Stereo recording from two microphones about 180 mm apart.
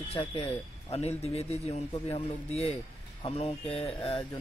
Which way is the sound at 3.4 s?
30° left (ahead or behind).